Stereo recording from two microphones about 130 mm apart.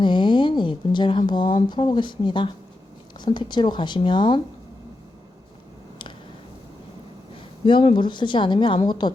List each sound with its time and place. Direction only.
0.0 s a sound: 35° left (ahead or behind)
1.3 s speech: 35° left (ahead or behind)
7.6 s speech: 40° left (ahead or behind)